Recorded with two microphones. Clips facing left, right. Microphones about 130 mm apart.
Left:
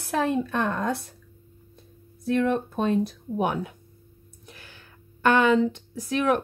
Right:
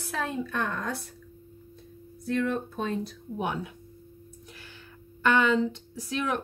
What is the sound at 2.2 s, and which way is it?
Speech, 60° left (ahead or behind).